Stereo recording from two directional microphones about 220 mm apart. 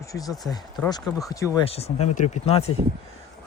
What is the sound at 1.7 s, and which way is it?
Speech, 25° left (ahead or behind).